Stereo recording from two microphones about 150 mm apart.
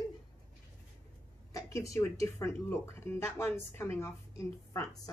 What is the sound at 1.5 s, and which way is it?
Speech, 20° left (ahead or behind).